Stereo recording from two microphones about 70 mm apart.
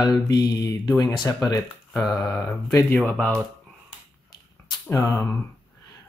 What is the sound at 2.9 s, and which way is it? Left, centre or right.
Speech, left.